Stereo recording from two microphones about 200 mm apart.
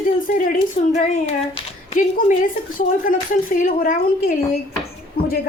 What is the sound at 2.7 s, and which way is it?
Speech, 40° left (ahead or behind).